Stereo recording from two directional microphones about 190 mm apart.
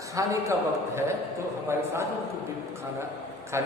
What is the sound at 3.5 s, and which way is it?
Speech, 15° right (ahead or behind).